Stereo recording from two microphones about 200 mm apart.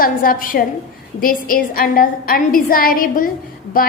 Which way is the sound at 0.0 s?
45° left (ahead or behind).